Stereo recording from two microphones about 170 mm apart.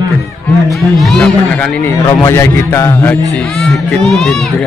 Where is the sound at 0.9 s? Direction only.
Centre (ahead or behind).